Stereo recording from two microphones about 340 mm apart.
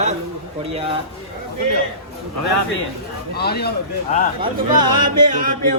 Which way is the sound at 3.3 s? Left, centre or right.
Left.